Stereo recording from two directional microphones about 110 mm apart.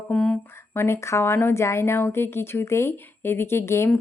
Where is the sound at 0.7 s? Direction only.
25° left (ahead or behind).